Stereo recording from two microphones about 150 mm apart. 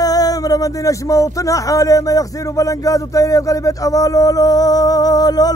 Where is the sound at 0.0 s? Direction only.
25° left (ahead or behind).